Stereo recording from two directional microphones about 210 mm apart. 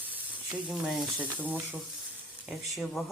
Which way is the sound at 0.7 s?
Centre (ahead or behind).